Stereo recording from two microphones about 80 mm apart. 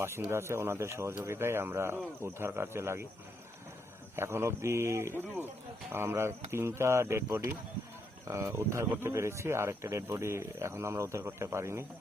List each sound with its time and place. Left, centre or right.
0.3 s speech: right
4.1 s speech: right